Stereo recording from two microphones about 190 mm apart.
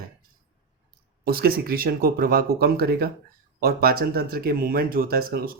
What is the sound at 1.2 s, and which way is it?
Speech, 50° right (ahead or behind).